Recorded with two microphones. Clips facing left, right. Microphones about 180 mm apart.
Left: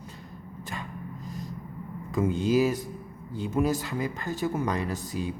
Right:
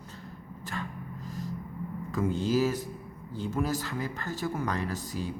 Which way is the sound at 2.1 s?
20° left (ahead or behind).